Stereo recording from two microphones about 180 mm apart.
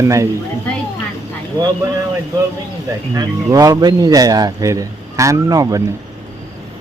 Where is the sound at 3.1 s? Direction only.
20° right (ahead or behind).